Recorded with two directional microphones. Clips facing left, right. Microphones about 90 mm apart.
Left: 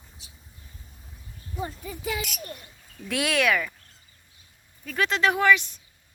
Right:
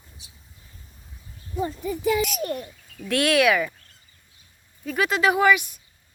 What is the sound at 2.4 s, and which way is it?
Speech, 75° right (ahead or behind).